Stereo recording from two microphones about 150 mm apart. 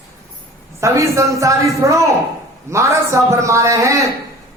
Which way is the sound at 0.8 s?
20° right (ahead or behind).